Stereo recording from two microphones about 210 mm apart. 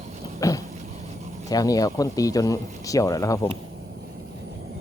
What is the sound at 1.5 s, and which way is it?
Speech, 15° left (ahead or behind).